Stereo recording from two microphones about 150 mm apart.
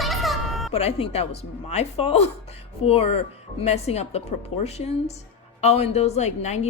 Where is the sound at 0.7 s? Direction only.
45° left (ahead or behind).